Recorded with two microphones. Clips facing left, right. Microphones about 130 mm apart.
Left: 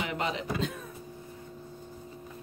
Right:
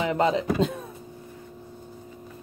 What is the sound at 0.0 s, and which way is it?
Speech, 35° right (ahead or behind).